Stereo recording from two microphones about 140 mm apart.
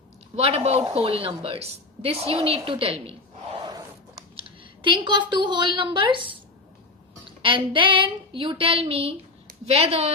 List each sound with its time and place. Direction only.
0.3 s a woman's voice: 45° right (ahead or behind)
7.4 s a woman's voice: 40° right (ahead or behind)